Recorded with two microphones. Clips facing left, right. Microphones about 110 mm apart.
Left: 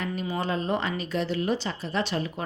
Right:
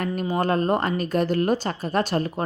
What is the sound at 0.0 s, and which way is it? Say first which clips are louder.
A woman's voice: right 6 dB; 50° right (ahead or behind).